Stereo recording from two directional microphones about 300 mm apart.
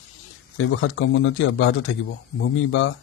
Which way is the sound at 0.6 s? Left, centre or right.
Left.